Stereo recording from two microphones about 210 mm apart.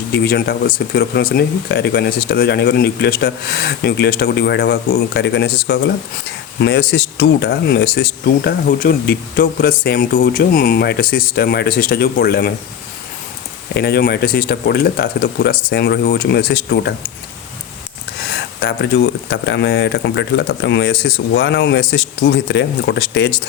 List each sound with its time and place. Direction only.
0.1 s speech: 50° left (ahead or behind)
13.7 s speech: 50° left (ahead or behind)
18.6 s speech: 55° left (ahead or behind)